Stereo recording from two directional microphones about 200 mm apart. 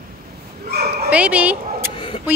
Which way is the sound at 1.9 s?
25° left (ahead or behind).